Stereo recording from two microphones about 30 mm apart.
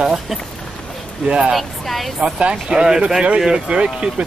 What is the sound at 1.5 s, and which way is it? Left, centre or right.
Speech, centre.